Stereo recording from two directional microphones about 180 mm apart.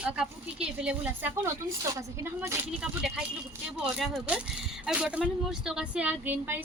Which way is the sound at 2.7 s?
5° right (ahead or behind).